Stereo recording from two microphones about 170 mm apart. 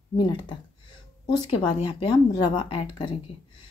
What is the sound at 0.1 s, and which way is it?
Speech, 25° left (ahead or behind).